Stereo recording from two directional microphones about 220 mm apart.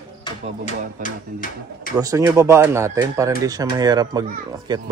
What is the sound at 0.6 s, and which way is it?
Speech, 40° left (ahead or behind).